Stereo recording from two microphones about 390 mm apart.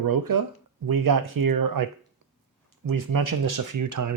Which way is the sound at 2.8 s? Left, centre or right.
Right.